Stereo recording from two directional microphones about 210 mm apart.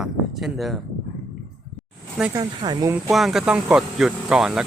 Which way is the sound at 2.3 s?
20° right (ahead or behind).